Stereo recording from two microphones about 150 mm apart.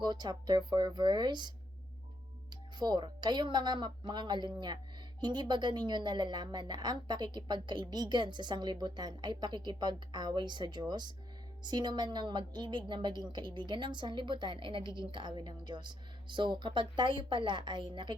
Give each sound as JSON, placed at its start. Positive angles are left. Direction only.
{"t": 0.0, "sound": "a woman's voice", "side_deg": -30}
{"t": 2.7, "sound": "a woman's voice", "side_deg": -30}